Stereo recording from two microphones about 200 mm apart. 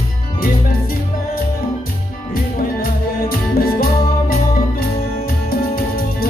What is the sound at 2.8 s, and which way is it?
Music, 45° left (ahead or behind).